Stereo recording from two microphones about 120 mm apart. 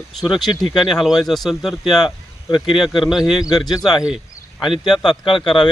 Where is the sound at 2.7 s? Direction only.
Centre (ahead or behind).